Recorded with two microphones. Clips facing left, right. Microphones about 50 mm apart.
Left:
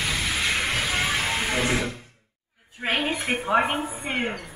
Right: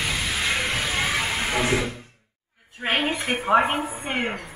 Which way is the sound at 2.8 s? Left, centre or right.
Right.